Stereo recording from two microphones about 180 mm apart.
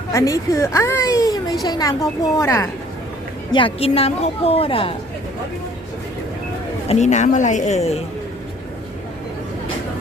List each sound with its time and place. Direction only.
0.1 s a woman's voice: 15° left (ahead or behind)
3.5 s speech: 30° left (ahead or behind)
6.8 s speech: 40° left (ahead or behind)